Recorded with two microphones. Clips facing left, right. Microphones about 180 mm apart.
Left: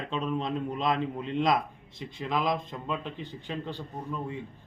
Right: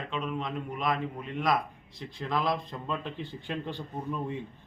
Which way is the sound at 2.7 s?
5° left (ahead or behind).